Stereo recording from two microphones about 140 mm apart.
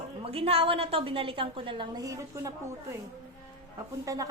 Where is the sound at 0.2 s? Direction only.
45° right (ahead or behind); by 2.5 s 20° right (ahead or behind).